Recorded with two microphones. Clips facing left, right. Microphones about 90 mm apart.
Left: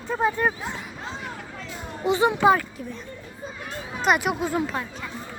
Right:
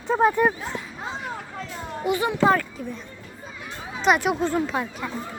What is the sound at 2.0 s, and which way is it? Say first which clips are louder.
Speech: left 3 dB; 25° left (ahead or behind).